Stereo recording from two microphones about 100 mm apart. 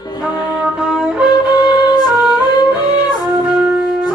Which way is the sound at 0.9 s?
10° right (ahead or behind).